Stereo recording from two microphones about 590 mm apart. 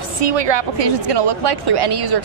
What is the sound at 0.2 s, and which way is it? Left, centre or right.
Speech, right.